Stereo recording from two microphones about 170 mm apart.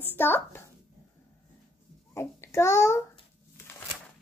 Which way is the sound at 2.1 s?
15° left (ahead or behind).